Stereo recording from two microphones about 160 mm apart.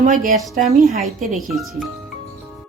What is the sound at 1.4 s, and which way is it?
Speech, centre (ahead or behind).